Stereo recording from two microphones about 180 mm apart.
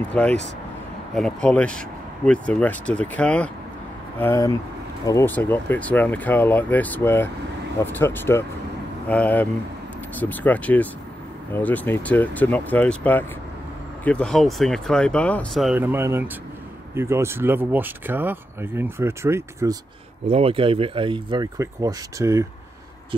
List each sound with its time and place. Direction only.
0.1 s speech: 10° left (ahead or behind)
15.8 s speech: 15° right (ahead or behind)
20.2 s speech: 35° right (ahead or behind); by 22.5 s 15° right (ahead or behind)